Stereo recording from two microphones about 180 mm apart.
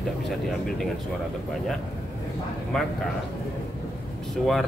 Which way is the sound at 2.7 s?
5° left (ahead or behind).